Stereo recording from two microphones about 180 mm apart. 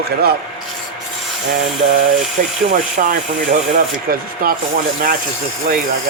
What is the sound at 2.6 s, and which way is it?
Speech, 45° right (ahead or behind).